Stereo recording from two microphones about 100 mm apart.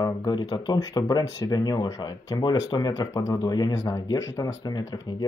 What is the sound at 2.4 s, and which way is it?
Speech, 45° left (ahead or behind).